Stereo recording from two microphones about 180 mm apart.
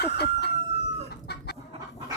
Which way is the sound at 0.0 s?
65° left (ahead or behind).